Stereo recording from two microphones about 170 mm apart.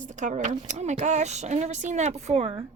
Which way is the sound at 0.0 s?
45° right (ahead or behind).